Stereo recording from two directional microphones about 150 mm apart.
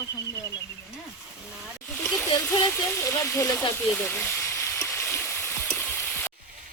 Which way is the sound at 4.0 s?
15° left (ahead or behind).